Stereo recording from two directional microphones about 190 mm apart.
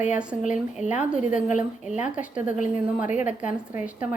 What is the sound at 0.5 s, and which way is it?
A woman's voice, 5° right (ahead or behind).